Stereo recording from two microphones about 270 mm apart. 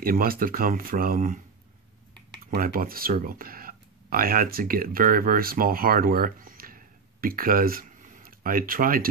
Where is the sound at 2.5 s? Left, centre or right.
Right.